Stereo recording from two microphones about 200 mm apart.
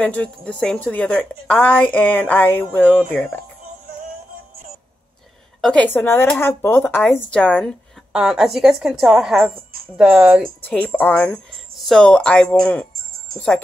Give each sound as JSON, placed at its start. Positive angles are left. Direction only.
{"t": 0.0, "sound": "a woman's voice", "side_deg": 5}
{"t": 5.6, "sound": "a woman's voice", "side_deg": 5}
{"t": 12.9, "sound": "music", "side_deg": -45}